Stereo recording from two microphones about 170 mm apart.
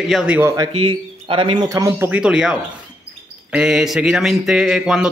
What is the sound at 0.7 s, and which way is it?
Speech, 30° right (ahead or behind).